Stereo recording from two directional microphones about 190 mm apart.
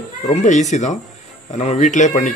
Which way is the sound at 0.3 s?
35° left (ahead or behind).